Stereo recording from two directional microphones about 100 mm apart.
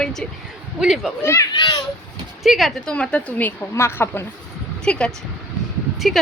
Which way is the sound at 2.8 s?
10° left (ahead or behind).